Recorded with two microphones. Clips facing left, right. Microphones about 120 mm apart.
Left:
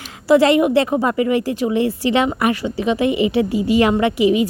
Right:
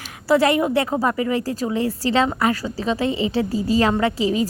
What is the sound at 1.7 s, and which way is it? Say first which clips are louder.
A woman's voice: left 4 dB; 25° left (ahead or behind).